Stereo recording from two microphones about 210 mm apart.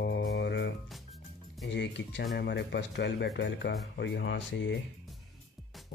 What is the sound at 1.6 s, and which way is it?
Speech, 55° left (ahead or behind).